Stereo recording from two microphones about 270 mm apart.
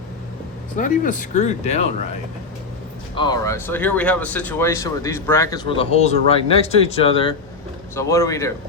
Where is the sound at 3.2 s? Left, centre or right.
Centre.